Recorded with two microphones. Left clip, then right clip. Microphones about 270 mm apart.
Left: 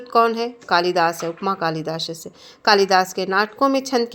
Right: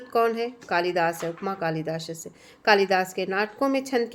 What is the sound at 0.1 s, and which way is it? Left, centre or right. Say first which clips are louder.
Speech: left 6 dB; centre.